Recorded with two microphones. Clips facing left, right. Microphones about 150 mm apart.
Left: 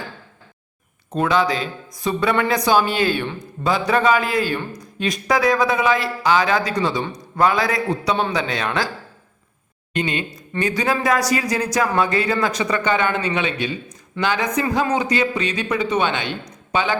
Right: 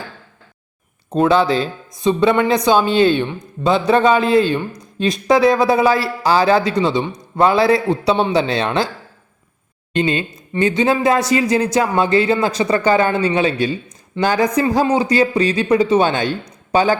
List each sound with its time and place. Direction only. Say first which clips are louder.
1.1 s speech: right 5 dB; 30° right (ahead or behind)
9.9 s speech: right 5 dB; 30° right (ahead or behind)